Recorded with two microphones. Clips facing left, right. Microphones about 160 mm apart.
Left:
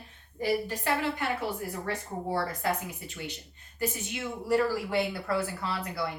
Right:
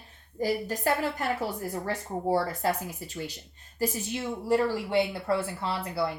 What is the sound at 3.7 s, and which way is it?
A woman's voice, 30° right (ahead or behind).